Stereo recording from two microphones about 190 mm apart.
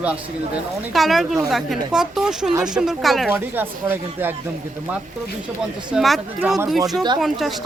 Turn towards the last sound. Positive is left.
turn(degrees=0)  # may be behind; listen again after turning